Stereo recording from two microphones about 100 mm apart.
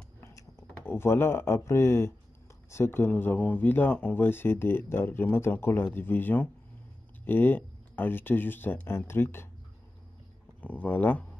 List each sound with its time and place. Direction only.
0.2 s a sound: 30° left (ahead or behind)
0.7 s speech: 25° left (ahead or behind)
10.6 s speech: 15° left (ahead or behind)